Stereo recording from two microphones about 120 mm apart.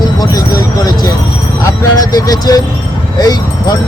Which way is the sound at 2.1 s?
30° left (ahead or behind).